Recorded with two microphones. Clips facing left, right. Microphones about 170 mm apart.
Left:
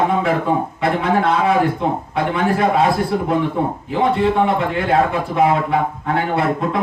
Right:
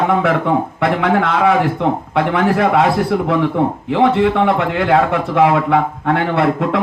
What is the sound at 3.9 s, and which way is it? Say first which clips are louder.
A man's voice: right 3 dB; 75° right (ahead or behind).